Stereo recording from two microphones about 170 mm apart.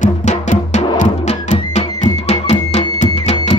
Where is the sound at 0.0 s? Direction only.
45° left (ahead or behind).